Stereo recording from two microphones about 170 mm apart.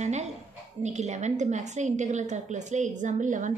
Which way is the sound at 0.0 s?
40° right (ahead or behind).